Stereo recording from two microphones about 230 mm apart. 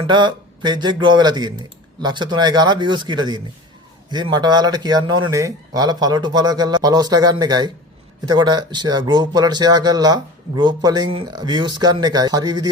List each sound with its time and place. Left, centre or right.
0.1 s speech: centre